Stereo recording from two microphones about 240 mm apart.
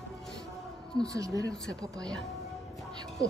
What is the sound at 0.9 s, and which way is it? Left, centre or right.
Speech, centre.